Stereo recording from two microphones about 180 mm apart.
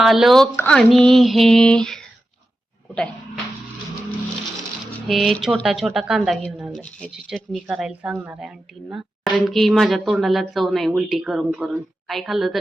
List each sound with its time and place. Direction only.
0.0 s speech: centre (ahead or behind)
0.5 s a sound: 5° left (ahead or behind)
0.9 s speech: centre (ahead or behind)
5.0 s speech: centre (ahead or behind)